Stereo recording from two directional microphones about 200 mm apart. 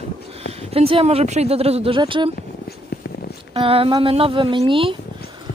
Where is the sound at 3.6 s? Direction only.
30° right (ahead or behind).